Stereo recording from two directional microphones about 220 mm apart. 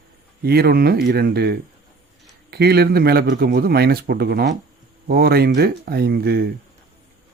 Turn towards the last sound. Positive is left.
turn(degrees=-45)  # may be behind; listen again after turning